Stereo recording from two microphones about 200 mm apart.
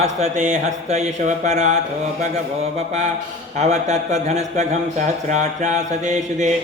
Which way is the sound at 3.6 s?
35° right (ahead or behind).